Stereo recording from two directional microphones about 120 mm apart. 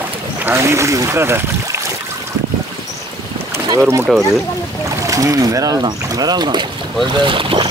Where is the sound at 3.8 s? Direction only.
20° right (ahead or behind).